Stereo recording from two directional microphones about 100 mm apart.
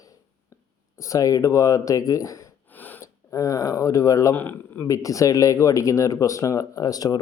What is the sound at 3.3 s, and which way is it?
Speech, 35° left (ahead or behind).